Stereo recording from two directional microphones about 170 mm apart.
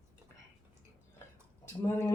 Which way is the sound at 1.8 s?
15° left (ahead or behind).